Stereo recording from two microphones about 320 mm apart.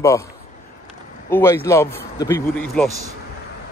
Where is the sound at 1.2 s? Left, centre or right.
Centre.